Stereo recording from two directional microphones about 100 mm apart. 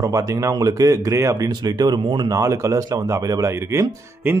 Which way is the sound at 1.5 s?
45° right (ahead or behind).